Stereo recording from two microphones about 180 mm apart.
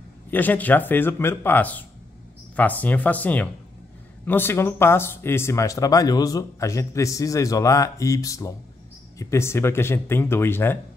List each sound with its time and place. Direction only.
0.3 s speech: 10° left (ahead or behind)